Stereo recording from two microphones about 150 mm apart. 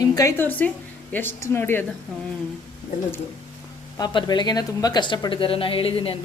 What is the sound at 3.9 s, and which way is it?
Speech, 30° left (ahead or behind).